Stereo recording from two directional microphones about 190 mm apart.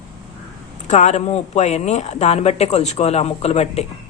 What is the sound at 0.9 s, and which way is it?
Speech, 35° left (ahead or behind).